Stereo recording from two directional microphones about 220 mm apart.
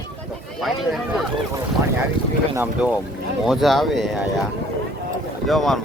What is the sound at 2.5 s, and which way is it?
Speech, 10° right (ahead or behind).